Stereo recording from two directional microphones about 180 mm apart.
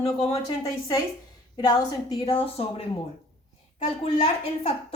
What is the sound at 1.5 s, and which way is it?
Speech, 20° left (ahead or behind).